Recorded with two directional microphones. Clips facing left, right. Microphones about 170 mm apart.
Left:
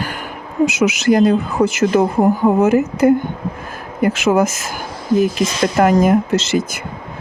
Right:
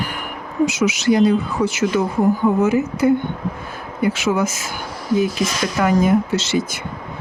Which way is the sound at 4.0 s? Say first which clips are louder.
Left 4 dB; 45° left (ahead or behind).